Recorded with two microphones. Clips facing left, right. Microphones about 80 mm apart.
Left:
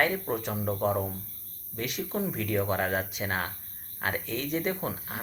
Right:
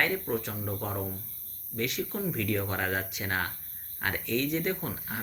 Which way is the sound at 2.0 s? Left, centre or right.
Centre.